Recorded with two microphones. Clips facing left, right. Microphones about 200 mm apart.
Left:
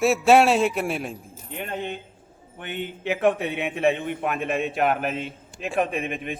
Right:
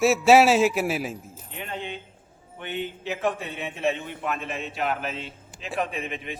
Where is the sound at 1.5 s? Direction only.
50° left (ahead or behind).